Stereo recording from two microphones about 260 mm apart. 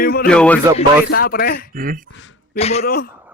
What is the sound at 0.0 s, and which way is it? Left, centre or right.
Speech, left.